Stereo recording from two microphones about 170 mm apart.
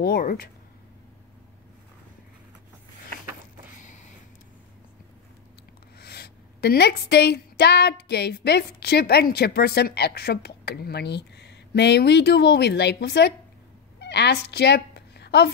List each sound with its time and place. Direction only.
0.0 s speech: 60° left (ahead or behind)
3.8 s a sound: 45° left (ahead or behind)
5.9 s a woman's voice: 70° left (ahead or behind)
13.9 s cat: 80° left